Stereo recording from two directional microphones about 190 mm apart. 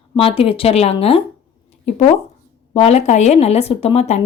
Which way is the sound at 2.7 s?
35° left (ahead or behind).